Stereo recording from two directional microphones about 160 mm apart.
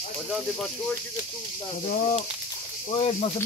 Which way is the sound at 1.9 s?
50° left (ahead or behind).